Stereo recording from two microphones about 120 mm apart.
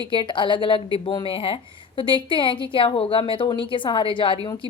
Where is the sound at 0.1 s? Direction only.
40° left (ahead or behind).